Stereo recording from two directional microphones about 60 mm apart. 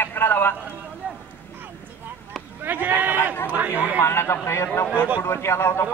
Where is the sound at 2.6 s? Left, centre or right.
Right.